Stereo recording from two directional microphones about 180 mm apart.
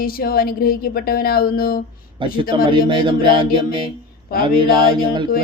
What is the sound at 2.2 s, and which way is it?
Speech, 25° right (ahead or behind).